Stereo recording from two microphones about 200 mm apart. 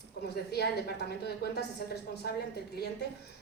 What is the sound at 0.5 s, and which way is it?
A woman's voice, 55° left (ahead or behind).